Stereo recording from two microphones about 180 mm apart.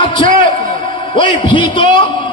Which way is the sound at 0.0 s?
30° left (ahead or behind).